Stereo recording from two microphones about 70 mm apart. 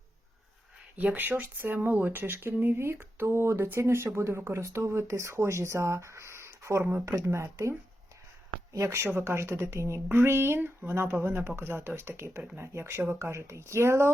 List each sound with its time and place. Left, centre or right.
0.9 s speech: right
3.2 s a woman's voice: right